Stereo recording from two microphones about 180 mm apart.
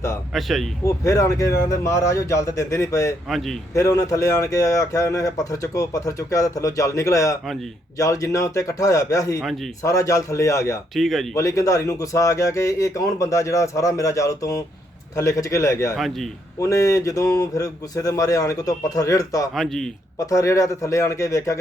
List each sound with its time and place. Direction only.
0.3 s speech: centre (ahead or behind)
0.9 s speech: 20° left (ahead or behind)
3.2 s speech: centre (ahead or behind)
3.8 s speech: 20° left (ahead or behind)
9.4 s speech: centre (ahead or behind)
9.8 s speech: 15° left (ahead or behind)
10.9 s speech: centre (ahead or behind)
11.3 s speech: 20° left (ahead or behind)
16.0 s speech: centre (ahead or behind)
16.6 s speech: 15° left (ahead or behind)
19.5 s speech: centre (ahead or behind)
20.1 s speech: 15° left (ahead or behind)